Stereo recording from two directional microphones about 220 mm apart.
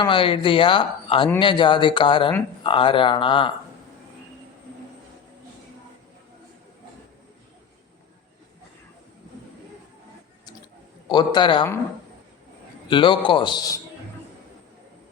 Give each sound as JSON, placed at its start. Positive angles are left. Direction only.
{"t": 0.0, "sound": "speech", "side_deg": 25}
{"t": 11.1, "sound": "speech", "side_deg": 20}
{"t": 12.9, "sound": "speech", "side_deg": 20}